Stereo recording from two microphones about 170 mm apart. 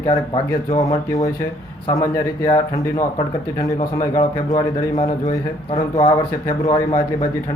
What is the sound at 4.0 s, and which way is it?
Speech, 20° left (ahead or behind).